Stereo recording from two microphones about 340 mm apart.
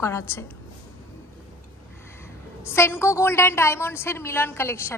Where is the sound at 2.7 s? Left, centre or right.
Centre.